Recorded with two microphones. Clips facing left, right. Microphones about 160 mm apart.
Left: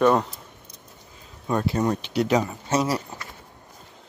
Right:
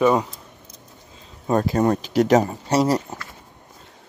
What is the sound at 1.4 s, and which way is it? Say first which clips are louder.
Speech: right 4 dB; 40° right (ahead or behind).